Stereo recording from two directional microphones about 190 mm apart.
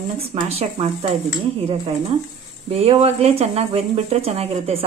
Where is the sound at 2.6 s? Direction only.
30° right (ahead or behind).